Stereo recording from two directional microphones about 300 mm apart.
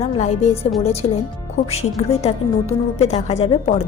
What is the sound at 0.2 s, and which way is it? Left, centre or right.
Speech, left.